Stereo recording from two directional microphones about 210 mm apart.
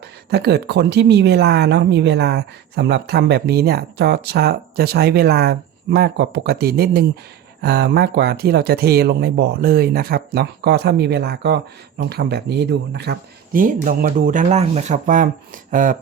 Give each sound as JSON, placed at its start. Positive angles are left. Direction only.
{"t": 0.3, "sound": "speech", "side_deg": -50}